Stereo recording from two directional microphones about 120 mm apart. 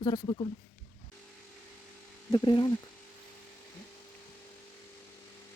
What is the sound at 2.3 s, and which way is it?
Speech, 40° left (ahead or behind).